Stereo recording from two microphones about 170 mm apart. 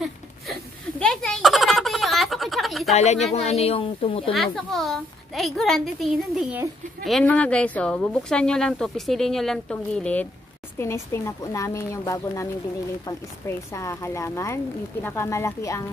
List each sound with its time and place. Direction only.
0.0 s a sound: centre (ahead or behind)
3.0 s a woman's voice: 40° left (ahead or behind)
4.3 s speech: centre (ahead or behind); by 15.8 s 15° left (ahead or behind)